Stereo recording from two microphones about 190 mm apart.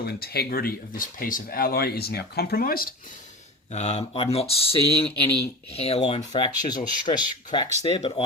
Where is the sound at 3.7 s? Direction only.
35° left (ahead or behind).